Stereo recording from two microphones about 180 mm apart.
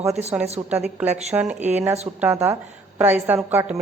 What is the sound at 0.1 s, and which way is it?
Speech, 35° right (ahead or behind).